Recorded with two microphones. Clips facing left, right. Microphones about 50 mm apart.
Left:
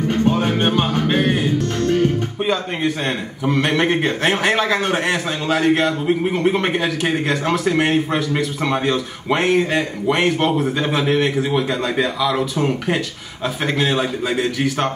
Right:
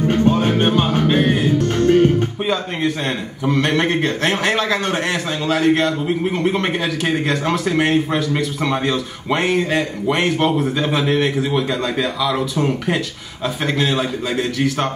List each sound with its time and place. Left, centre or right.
0.3 s music: centre
1.7 s music: right
2.4 s a man's voice: centre